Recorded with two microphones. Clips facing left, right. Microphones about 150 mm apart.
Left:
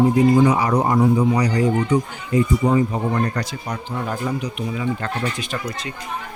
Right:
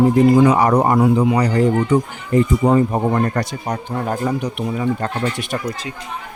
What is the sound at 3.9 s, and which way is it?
Speech, 45° right (ahead or behind).